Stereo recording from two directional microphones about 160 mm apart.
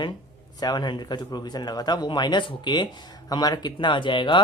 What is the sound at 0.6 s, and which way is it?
Speech, 25° left (ahead or behind).